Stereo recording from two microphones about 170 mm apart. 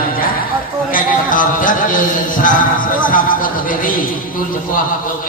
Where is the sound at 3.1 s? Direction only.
55° left (ahead or behind).